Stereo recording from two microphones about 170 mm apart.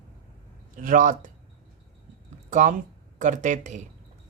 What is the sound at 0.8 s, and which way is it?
Speech, 50° right (ahead or behind).